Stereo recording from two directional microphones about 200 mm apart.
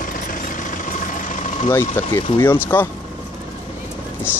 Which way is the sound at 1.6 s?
10° left (ahead or behind).